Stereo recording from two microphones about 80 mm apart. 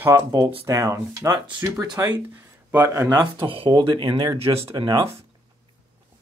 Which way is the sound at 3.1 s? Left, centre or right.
Right.